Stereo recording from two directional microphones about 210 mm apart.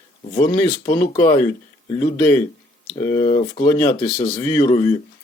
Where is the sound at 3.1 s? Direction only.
35° left (ahead or behind).